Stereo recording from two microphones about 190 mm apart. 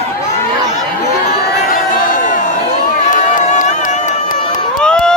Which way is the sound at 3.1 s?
40° left (ahead or behind).